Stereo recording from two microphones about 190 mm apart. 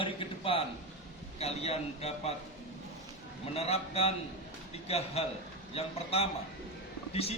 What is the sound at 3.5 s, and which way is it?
A man's voice, 30° left (ahead or behind).